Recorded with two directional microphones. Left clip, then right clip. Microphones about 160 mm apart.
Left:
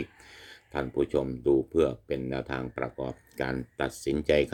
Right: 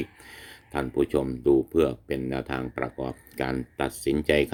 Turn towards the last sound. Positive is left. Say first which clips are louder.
# right 2 dB
turn(degrees=-5)  # may be behind; listen again after turning